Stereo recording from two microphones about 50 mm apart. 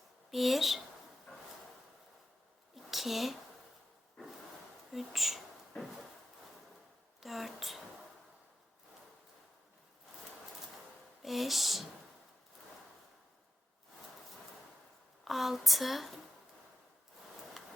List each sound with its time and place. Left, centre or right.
0.3 s speech: centre
2.7 s a sound: centre
4.9 s speech: centre
7.2 s speech: centre
11.2 s speech: centre
15.2 s speech: centre